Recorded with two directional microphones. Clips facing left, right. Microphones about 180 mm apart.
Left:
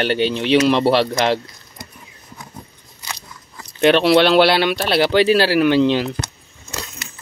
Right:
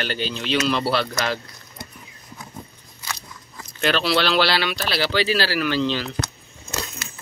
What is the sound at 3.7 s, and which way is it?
Speech, 55° left (ahead or behind).